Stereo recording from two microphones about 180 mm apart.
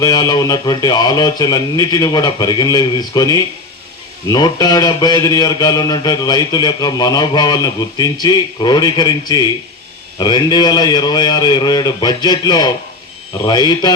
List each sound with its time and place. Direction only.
0.0 s a man's voice: 20° left (ahead or behind)